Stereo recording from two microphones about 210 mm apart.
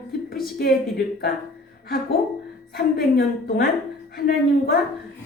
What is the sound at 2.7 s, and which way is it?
A woman's voice, 45° left (ahead or behind).